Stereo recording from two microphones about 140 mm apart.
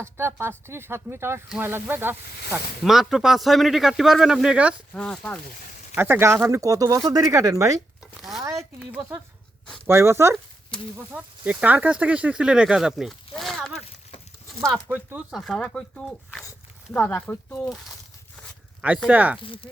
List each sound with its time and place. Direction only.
0.0 s speech: 15° right (ahead or behind)
2.8 s speech: centre (ahead or behind)
4.9 s speech: 5° left (ahead or behind)
5.9 s speech: 15° right (ahead or behind)
8.2 s a sound: centre (ahead or behind)
9.8 s speech: 20° right (ahead or behind); by 13.8 s 5° left (ahead or behind)
14.8 s speech: 10° right (ahead or behind)
15.4 s speech: centre (ahead or behind)
19.0 s speech: 10° right (ahead or behind)
19.4 s speech: 40° left (ahead or behind)